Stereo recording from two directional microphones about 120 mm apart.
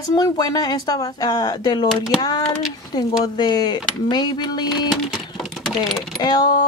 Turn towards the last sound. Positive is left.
turn(degrees=35)  # may be behind; listen again after turning